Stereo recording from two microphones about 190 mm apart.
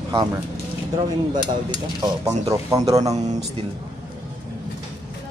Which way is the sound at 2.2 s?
15° right (ahead or behind).